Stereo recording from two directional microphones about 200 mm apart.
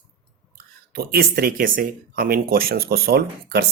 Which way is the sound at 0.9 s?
50° right (ahead or behind).